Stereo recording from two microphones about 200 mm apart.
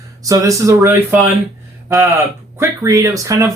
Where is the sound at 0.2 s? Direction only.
15° right (ahead or behind).